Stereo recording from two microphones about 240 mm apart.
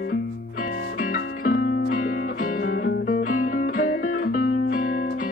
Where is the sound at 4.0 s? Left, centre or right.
Left.